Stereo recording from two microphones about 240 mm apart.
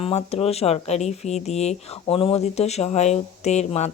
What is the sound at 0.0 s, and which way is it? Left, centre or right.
A woman's voice, left.